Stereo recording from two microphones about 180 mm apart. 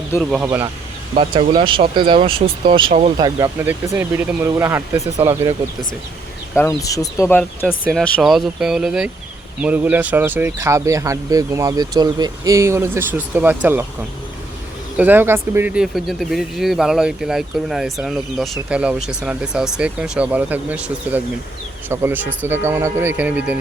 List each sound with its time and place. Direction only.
0.2 s speech: centre (ahead or behind)
1.4 s speech: 30° right (ahead or behind)
3.6 s speech: 10° right (ahead or behind)
6.6 s speech: 20° left (ahead or behind); by 13.8 s 10° right (ahead or behind)
14.9 s speech: 10° right (ahead or behind)